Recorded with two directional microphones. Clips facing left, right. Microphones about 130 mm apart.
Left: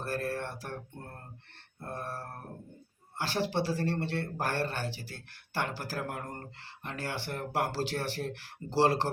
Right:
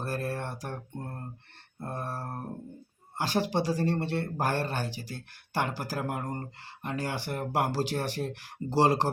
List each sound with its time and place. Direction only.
0.0 s a sound: 15° right (ahead or behind)
1.8 s mantra: 15° right (ahead or behind)
3.2 s speech: 15° right (ahead or behind)